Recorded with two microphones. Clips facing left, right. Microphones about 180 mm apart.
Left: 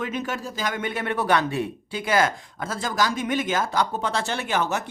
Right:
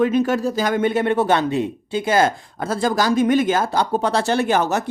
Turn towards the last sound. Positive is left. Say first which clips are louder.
# right 7 dB
turn(degrees=-40)  # may be behind; listen again after turning